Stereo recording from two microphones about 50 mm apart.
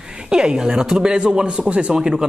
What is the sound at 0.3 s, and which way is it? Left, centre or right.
Speech, centre.